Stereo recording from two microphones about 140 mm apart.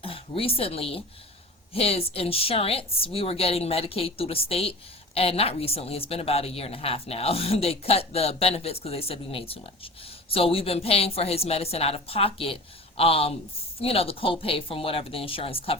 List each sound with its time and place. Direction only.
0.0 s a woman's voice: 40° left (ahead or behind)